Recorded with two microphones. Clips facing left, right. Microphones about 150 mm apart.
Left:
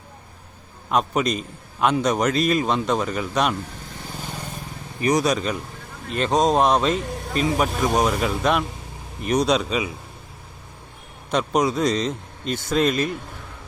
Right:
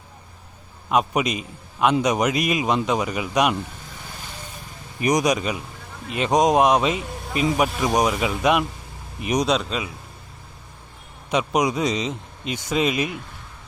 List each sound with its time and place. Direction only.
0.9 s a man's voice: 10° right (ahead or behind)
5.0 s a man's voice: 15° right (ahead or behind)
9.5 s speech: 5° left (ahead or behind)
11.3 s a man's voice: 10° right (ahead or behind)